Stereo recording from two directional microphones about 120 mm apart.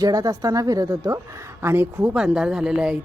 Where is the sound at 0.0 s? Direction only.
30° right (ahead or behind).